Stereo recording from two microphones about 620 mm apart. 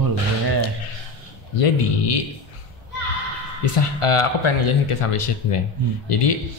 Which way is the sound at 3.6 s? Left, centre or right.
Left.